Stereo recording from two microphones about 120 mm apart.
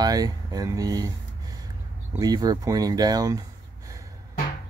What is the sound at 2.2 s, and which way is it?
Speech, 35° right (ahead or behind).